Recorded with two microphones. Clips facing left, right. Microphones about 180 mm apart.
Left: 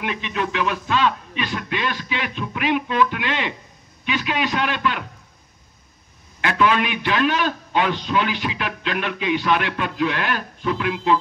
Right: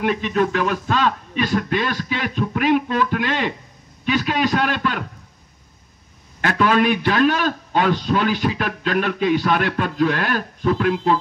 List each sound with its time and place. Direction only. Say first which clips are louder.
0.0 s a man's voice: right 6 dB; 45° right (ahead or behind)
6.4 s a man's voice: right 3 dB; 45° right (ahead or behind)